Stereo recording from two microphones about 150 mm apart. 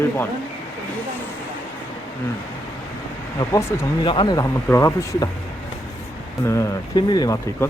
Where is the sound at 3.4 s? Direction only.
20° left (ahead or behind).